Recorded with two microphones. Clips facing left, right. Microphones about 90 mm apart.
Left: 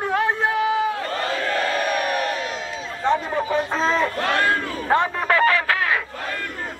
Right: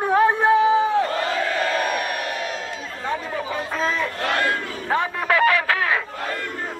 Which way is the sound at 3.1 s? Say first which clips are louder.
Left 6 dB; 25° left (ahead or behind).